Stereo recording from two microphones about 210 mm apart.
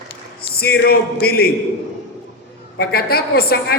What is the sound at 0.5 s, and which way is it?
Speech, 45° left (ahead or behind).